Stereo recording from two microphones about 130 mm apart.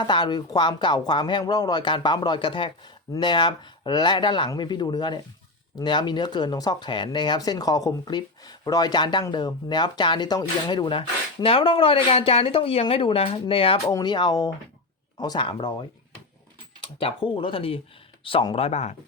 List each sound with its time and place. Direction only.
0.0 s speech: 35° left (ahead or behind)
13.8 s speech: 30° left (ahead or behind); by 18.9 s 55° left (ahead or behind)